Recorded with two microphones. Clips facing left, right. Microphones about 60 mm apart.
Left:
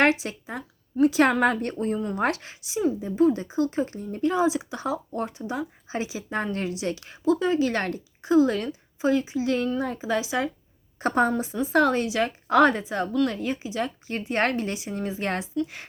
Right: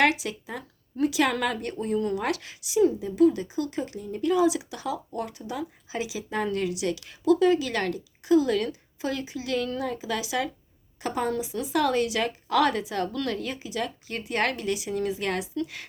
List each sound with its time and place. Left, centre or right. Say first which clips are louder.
0.0 s speech: left 2 dB; left
11.0 s a woman's voice: left 6 dB; left
11.6 s speech: left 3 dB; left